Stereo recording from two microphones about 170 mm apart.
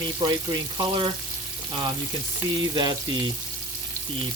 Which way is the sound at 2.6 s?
25° right (ahead or behind).